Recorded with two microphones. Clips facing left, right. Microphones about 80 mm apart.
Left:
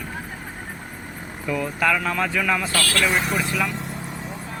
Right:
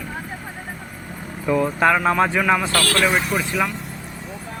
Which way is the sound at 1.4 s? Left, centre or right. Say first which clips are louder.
Right 5 dB; right.